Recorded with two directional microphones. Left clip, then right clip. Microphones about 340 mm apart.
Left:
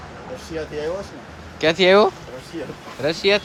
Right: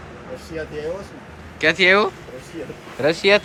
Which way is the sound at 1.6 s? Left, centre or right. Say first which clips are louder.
Left 1 dB; centre.